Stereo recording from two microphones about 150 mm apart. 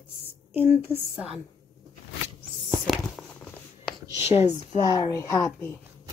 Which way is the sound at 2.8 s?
5° left (ahead or behind).